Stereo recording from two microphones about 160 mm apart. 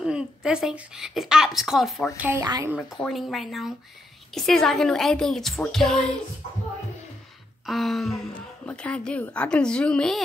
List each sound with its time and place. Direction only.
0.0 s a woman's voice: 5° right (ahead or behind)
2.1 s speech: 10° right (ahead or behind)
2.4 s a woman's voice: 25° right (ahead or behind)
3.0 s a woman's voice: centre (ahead or behind)
7.6 s a woman's voice: centre (ahead or behind)